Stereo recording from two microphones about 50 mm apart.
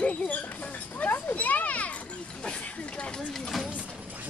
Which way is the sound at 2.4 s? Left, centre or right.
Centre.